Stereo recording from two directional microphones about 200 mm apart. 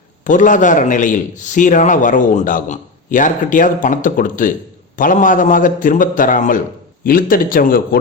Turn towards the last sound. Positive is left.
turn(degrees=45)  # may be behind; listen again after turning